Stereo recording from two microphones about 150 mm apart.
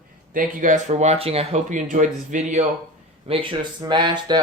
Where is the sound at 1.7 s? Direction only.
55° right (ahead or behind).